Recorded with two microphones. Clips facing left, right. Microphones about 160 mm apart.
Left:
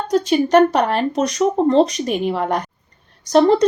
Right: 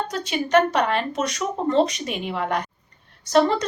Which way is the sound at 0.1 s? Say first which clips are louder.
Left 8 dB; 40° left (ahead or behind).